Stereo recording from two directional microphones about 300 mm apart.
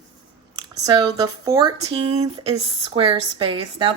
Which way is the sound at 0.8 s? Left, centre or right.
Centre.